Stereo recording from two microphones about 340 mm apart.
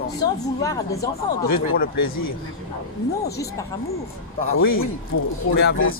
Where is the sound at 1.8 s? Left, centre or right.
Left.